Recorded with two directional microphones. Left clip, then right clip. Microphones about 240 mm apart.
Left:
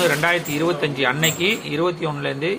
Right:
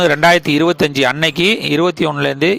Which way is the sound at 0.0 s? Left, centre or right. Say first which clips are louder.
Right 8 dB; right.